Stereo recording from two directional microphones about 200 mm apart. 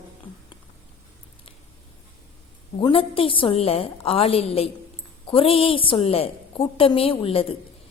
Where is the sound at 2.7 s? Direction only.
25° left (ahead or behind).